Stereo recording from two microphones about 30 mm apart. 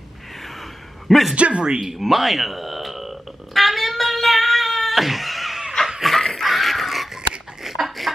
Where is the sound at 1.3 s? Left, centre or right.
Right.